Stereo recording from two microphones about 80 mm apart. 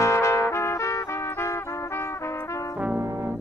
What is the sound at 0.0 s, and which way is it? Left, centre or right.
Trumpet, left.